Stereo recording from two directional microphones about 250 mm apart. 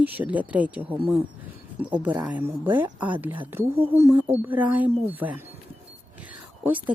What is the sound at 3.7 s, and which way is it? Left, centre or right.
Speech, right.